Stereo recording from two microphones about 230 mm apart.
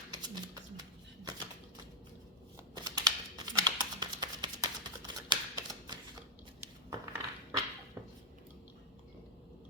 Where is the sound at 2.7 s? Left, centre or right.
Centre.